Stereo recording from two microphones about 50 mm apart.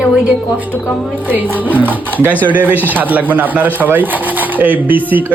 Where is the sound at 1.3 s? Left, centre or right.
Right.